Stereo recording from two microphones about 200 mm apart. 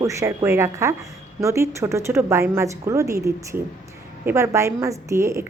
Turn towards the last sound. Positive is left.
turn(degrees=-15)  # may be behind; listen again after turning